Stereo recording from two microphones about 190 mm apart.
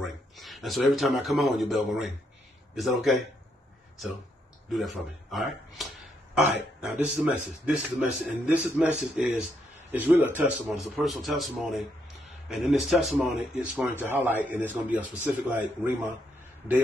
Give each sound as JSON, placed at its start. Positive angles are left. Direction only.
{"t": 0.0, "sound": "speech", "side_deg": 0}
{"t": 4.7, "sound": "a man's voice", "side_deg": 0}